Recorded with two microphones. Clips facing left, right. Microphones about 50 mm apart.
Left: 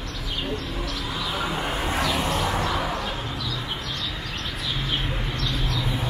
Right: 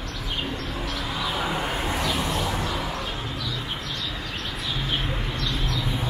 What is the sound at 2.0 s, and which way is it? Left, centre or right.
Vehicle, centre.